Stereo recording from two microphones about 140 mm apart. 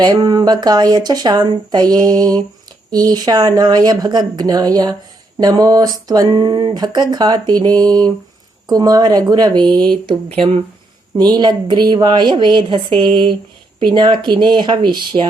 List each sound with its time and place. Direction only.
0.0 s a sound: 30° right (ahead or behind)
10.1 s speech: 40° right (ahead or behind)
11.2 s a woman's voice: 30° right (ahead or behind)